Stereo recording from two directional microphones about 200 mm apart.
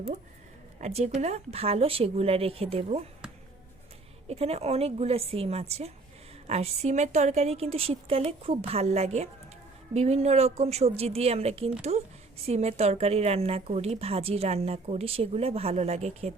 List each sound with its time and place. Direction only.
0.8 s a woman's voice: 35° right (ahead or behind)
4.3 s a woman's voice: 30° right (ahead or behind)